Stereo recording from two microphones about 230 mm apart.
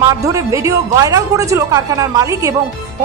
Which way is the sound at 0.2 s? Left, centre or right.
Centre.